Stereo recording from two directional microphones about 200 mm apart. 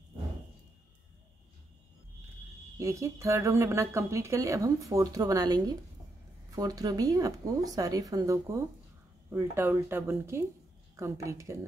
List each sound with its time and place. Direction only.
2.8 s a woman's voice: 15° right (ahead or behind)